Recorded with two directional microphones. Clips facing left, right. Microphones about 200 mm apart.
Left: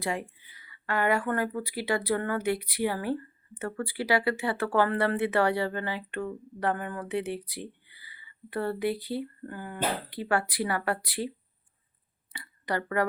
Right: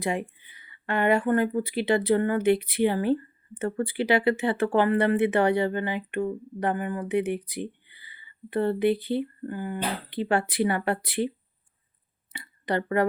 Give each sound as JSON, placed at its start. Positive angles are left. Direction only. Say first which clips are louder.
{"t": 0.0, "sound": "speech", "louder": "right 4 dB", "side_deg": -20}
{"t": 12.3, "sound": "speech", "louder": "right 4 dB", "side_deg": -25}